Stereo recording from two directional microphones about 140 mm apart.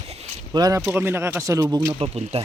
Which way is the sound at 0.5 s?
30° right (ahead or behind).